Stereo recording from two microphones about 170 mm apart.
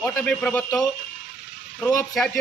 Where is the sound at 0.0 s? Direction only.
5° left (ahead or behind).